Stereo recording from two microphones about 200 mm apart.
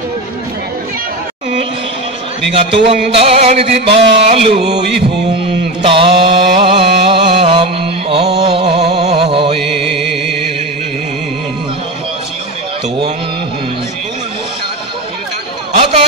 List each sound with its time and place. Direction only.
2.5 s music: 30° right (ahead or behind)
5.8 s mantra: 25° right (ahead or behind)
8.4 s music: 30° right (ahead or behind)
15.8 s a sound: 30° right (ahead or behind)